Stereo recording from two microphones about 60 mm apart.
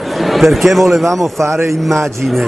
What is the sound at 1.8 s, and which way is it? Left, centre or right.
Speech, centre.